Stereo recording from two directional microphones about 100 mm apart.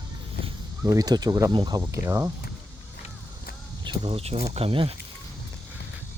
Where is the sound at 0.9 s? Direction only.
40° right (ahead or behind).